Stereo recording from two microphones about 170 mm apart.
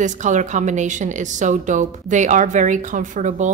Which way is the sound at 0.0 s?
45° right (ahead or behind).